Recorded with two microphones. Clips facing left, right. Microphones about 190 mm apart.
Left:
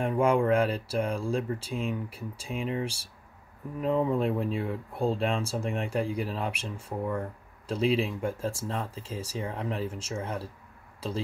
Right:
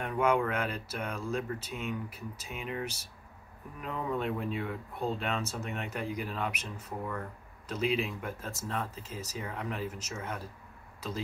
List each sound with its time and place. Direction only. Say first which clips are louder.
0.0 s speech: left 4 dB; 30° left (ahead or behind)